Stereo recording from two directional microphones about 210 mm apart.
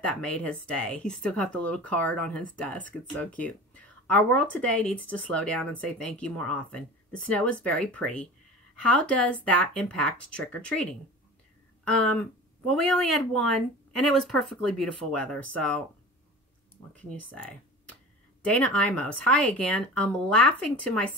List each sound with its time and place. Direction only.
0.0 s speech: 5° left (ahead or behind)
16.9 s speech: 5° left (ahead or behind)